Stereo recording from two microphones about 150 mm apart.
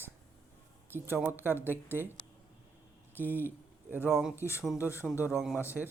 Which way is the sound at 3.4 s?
15° right (ahead or behind).